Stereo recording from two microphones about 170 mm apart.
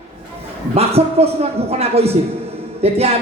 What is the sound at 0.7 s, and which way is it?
Speech, 35° right (ahead or behind).